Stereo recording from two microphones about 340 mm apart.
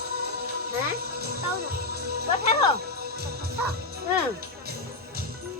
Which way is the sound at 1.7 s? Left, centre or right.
Right.